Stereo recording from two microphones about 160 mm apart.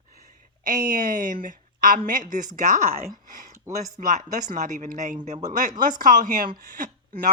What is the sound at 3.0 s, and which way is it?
A woman's voice, 55° right (ahead or behind).